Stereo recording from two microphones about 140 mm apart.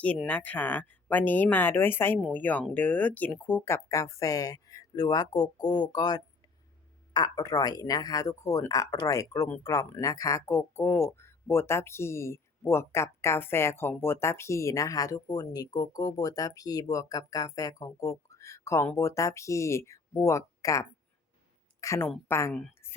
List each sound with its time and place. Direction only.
0.3 s speech: 10° left (ahead or behind)
21.8 s a sound: 20° left (ahead or behind)
22.3 s speech: 20° left (ahead or behind)
22.8 s whispering: 15° left (ahead or behind)